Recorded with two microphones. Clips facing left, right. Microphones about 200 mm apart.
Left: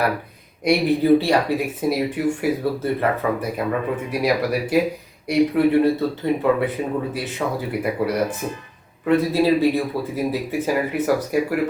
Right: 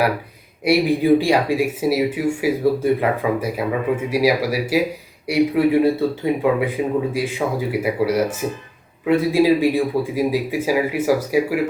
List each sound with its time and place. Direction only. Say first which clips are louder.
0.6 s speech: right 1 dB; 10° right (ahead or behind)